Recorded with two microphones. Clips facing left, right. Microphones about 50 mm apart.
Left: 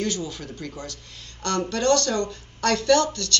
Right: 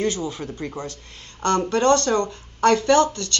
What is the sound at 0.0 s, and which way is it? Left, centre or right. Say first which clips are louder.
Speech: right 4 dB; right.